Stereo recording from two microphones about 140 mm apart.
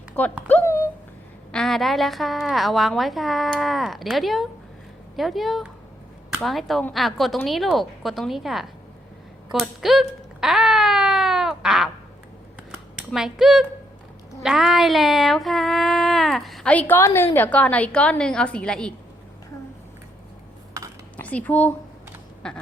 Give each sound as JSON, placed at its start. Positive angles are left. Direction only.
{"t": 0.4, "sound": "a sound", "side_deg": 15}
{"t": 1.5, "sound": "female singing", "side_deg": 0}
{"t": 9.5, "sound": "wail", "side_deg": 0}
{"t": 13.1, "sound": "female singing", "side_deg": -5}
{"t": 21.2, "sound": "speech", "side_deg": 10}